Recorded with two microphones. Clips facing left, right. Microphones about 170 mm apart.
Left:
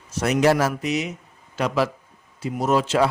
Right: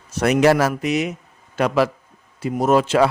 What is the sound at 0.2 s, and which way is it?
Speech, 65° right (ahead or behind).